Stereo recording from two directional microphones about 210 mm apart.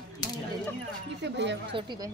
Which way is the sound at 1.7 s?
20° right (ahead or behind).